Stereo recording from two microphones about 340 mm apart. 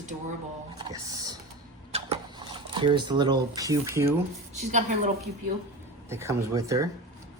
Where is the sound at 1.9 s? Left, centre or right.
Centre.